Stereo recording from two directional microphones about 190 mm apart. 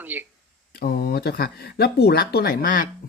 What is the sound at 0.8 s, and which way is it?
Speech, 55° left (ahead or behind).